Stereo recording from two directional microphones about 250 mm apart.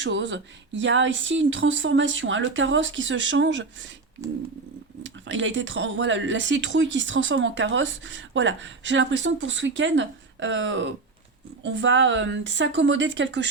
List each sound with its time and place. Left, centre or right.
0.0 s speech: right
5.0 s speech: right